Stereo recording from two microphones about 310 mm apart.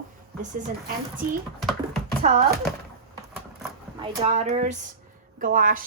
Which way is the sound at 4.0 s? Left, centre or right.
Centre.